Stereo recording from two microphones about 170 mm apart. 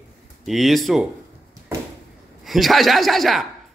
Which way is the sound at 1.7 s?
15° right (ahead or behind).